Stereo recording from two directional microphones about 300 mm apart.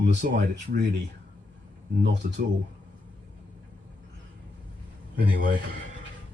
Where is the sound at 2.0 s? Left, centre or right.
Right.